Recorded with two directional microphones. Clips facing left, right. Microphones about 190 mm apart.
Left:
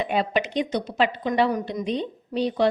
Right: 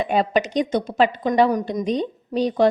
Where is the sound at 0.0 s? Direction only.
45° right (ahead or behind).